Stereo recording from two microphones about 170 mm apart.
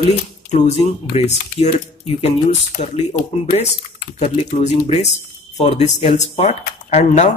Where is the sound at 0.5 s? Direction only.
40° left (ahead or behind).